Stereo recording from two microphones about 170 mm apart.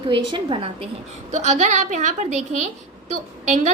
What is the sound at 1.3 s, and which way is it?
A woman's voice, 45° right (ahead or behind).